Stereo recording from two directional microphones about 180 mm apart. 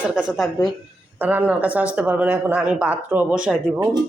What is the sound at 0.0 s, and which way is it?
Speech, 5° right (ahead or behind).